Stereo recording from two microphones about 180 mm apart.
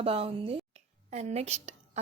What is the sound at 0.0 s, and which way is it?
Speech, 30° right (ahead or behind).